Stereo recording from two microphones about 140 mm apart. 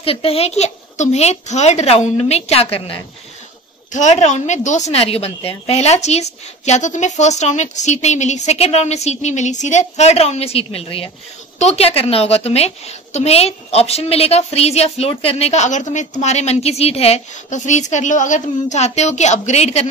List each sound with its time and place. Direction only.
0.0 s a woman's voice: 40° left (ahead or behind)
3.9 s a woman's voice: 55° left (ahead or behind)